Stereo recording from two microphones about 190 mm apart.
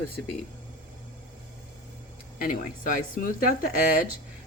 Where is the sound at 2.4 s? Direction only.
45° left (ahead or behind).